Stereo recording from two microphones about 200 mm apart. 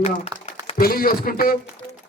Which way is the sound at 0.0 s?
30° left (ahead or behind).